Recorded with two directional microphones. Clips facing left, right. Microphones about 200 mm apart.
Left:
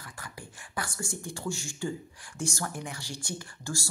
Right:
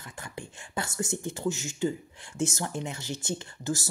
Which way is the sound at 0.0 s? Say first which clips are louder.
Right 4 dB; 25° right (ahead or behind).